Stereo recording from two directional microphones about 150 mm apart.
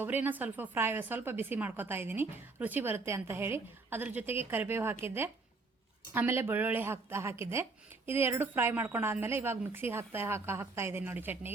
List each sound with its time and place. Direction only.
0.0 s speech: 15° right (ahead or behind)